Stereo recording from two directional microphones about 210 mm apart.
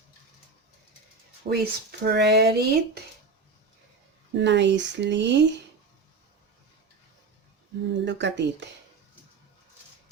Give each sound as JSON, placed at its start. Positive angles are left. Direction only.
{"t": 1.5, "sound": "speech", "side_deg": -50}
{"t": 4.4, "sound": "speech", "side_deg": -55}
{"t": 8.0, "sound": "speech", "side_deg": -55}